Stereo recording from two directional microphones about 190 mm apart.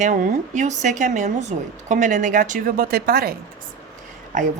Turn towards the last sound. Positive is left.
turn(degrees=-40)  # may be behind; listen again after turning